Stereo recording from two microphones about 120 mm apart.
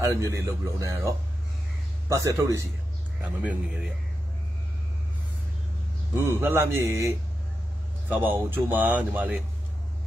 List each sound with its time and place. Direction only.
0.0 s speech: 25° right (ahead or behind)
3.2 s speech: 10° right (ahead or behind)
6.1 s speech: 20° right (ahead or behind)